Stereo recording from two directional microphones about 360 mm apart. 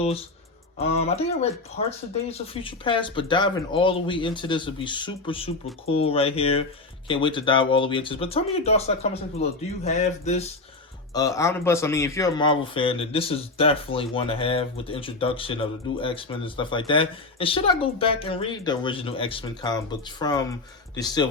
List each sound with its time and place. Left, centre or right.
0.8 s speech: centre